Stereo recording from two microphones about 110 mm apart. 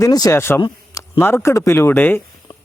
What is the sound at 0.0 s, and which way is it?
Speech, 35° left (ahead or behind).